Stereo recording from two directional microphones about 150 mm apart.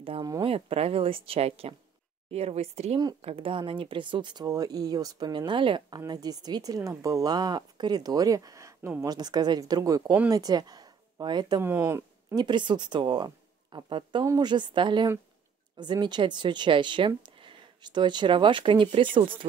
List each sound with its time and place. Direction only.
0.0 s a woman's voice: 40° right (ahead or behind)
11.6 s speech: 15° right (ahead or behind)
12.4 s speech: 30° right (ahead or behind)